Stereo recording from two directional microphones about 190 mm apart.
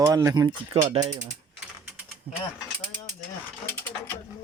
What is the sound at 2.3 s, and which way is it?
Speech, 30° right (ahead or behind).